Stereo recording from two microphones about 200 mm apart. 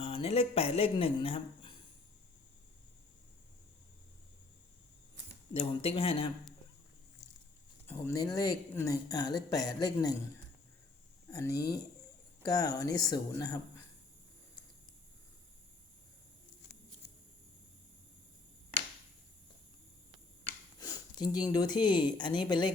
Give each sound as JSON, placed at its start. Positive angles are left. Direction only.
{"t": 0.0, "sound": "speech", "side_deg": 30}
{"t": 5.5, "sound": "speech", "side_deg": 30}
{"t": 7.9, "sound": "speech", "side_deg": 10}
{"t": 11.3, "sound": "speech", "side_deg": 15}
{"t": 20.7, "sound": "speech", "side_deg": 20}